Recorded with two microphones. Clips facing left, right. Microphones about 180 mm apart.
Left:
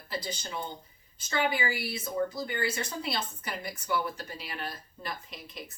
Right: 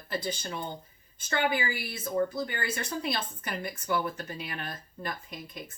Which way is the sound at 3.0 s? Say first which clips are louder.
Right 1 dB; 50° right (ahead or behind).